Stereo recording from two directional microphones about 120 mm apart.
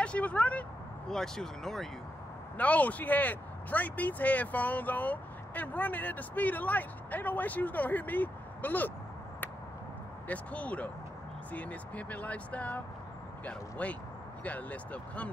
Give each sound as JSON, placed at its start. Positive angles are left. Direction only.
{"t": 0.0, "sound": "speech", "side_deg": 10}
{"t": 10.2, "sound": "speech", "side_deg": 10}